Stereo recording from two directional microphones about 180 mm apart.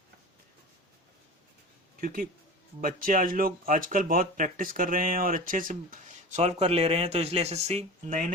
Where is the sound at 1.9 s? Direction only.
50° right (ahead or behind).